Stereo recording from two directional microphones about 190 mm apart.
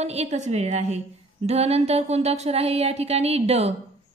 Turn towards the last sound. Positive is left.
turn(degrees=-35)  # may be behind; listen again after turning